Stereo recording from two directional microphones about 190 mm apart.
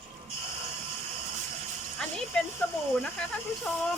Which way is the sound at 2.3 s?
5° left (ahead or behind).